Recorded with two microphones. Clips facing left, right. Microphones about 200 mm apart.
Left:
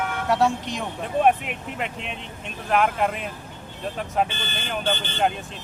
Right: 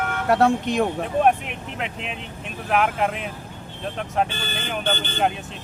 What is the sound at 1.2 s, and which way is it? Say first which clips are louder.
Speech: even; centre (ahead or behind).